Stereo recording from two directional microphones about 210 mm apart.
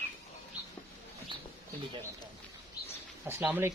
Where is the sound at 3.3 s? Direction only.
10° right (ahead or behind).